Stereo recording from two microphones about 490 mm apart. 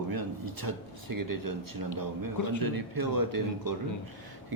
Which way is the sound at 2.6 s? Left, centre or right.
Right.